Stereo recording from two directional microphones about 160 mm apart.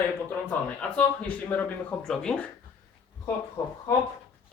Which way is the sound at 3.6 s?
25° left (ahead or behind).